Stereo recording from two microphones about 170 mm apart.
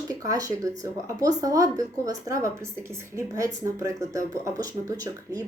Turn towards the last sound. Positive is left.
turn(degrees=-20)  # may be behind; listen again after turning